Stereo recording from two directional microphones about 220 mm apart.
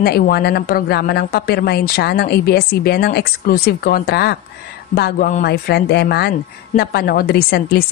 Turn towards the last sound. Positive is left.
turn(degrees=45)  # may be behind; listen again after turning